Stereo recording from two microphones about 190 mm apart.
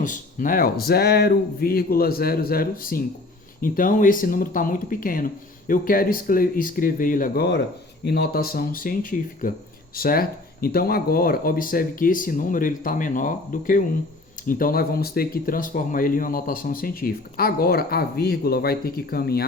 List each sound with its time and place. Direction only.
0.0 s speech: 45° left (ahead or behind)